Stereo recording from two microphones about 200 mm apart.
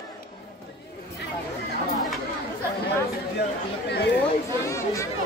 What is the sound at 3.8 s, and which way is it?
Chatter, 55° left (ahead or behind).